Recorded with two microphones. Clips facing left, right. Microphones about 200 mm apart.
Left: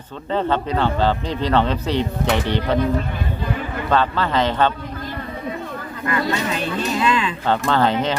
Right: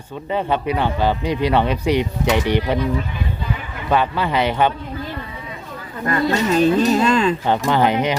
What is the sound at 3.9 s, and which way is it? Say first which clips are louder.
Speech: right 1 dB; 15° right (ahead or behind).